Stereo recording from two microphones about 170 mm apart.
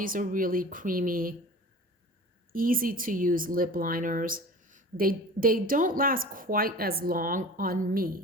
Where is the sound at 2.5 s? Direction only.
55° right (ahead or behind).